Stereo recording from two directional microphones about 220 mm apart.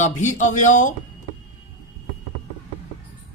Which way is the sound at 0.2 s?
35° left (ahead or behind).